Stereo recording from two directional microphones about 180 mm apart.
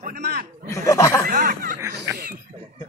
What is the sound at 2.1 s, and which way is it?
Speech, 55° right (ahead or behind).